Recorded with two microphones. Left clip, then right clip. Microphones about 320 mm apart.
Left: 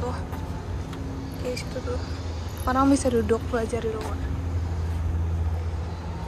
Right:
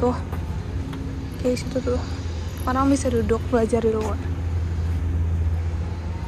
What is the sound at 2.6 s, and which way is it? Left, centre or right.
A woman's voice, centre.